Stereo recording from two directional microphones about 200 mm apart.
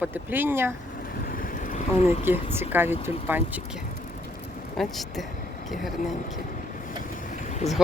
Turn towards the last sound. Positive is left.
turn(degrees=35)  # may be behind; listen again after turning